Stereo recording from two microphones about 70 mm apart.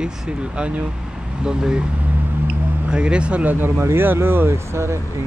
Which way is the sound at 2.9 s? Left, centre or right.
Centre.